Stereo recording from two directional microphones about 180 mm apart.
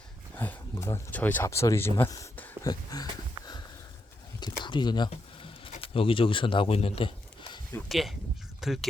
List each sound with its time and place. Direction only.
0.3 s speech: 15° left (ahead or behind)
2.6 s a sound: 20° left (ahead or behind)
5.8 s speech: 30° left (ahead or behind)
7.9 s speech: centre (ahead or behind)